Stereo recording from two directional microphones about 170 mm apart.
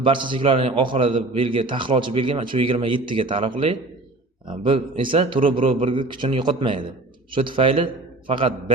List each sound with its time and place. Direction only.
0.0 s a man's voice: 30° right (ahead or behind)